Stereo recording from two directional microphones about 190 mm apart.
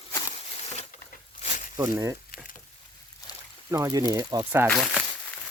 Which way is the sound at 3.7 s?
20° right (ahead or behind).